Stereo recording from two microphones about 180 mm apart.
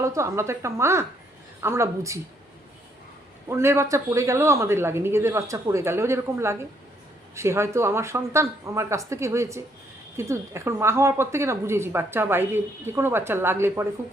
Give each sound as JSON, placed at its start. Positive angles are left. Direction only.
{"t": 0.0, "sound": "a woman's voice", "side_deg": -15}
{"t": 3.5, "sound": "a woman's voice", "side_deg": -15}